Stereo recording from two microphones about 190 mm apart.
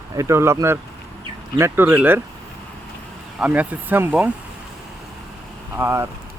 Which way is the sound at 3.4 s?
10° right (ahead or behind).